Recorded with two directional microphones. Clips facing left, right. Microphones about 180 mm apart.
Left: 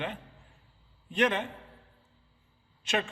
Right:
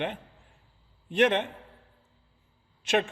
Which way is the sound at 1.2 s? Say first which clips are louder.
Right 4 dB; 55° right (ahead or behind).